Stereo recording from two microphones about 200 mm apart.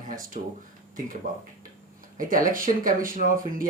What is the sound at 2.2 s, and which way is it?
Speech, 45° right (ahead or behind).